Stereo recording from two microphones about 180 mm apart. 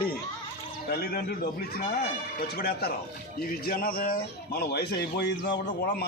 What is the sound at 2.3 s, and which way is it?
A man's voice, 60° left (ahead or behind).